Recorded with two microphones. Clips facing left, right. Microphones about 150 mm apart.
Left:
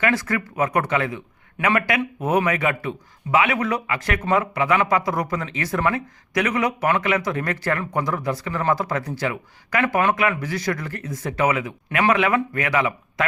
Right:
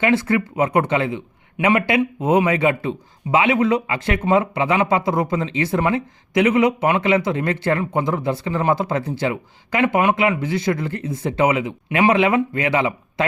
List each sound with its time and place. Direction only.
0.0 s speech: 25° right (ahead or behind)